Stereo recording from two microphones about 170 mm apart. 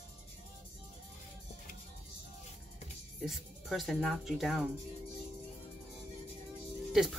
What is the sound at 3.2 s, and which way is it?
A woman's voice, centre (ahead or behind).